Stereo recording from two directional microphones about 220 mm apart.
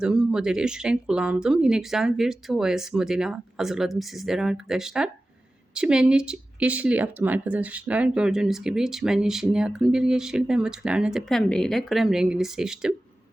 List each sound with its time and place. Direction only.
0.0 s speech: 5° right (ahead or behind)